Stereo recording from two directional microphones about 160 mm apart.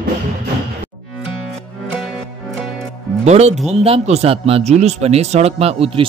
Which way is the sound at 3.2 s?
45° right (ahead or behind).